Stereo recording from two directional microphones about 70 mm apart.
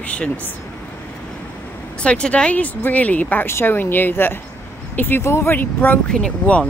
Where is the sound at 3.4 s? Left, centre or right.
Left.